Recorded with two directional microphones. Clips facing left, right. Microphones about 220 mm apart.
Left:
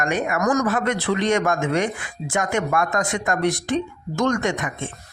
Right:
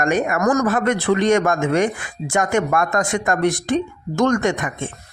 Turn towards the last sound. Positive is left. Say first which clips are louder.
# right 4 dB
turn(degrees=-50)  # may be behind; listen again after turning